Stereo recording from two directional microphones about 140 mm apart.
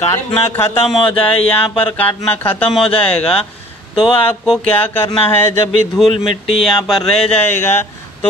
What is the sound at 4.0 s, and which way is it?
Speech, 35° left (ahead or behind).